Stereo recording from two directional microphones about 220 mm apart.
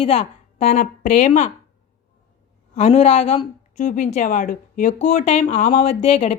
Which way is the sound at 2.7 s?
30° left (ahead or behind).